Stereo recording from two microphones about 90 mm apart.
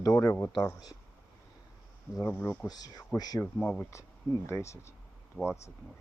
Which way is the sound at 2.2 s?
25° left (ahead or behind).